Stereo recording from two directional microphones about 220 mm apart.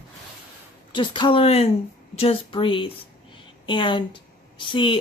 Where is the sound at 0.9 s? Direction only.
20° left (ahead or behind).